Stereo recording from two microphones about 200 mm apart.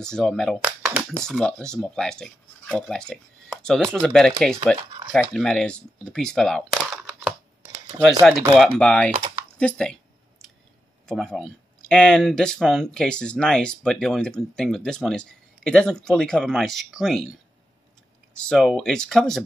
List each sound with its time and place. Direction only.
0.0 s speech: 5° left (ahead or behind)
5.1 s a sound: centre (ahead or behind)
8.2 s speech: 5° right (ahead or behind)
11.1 s speech: centre (ahead or behind)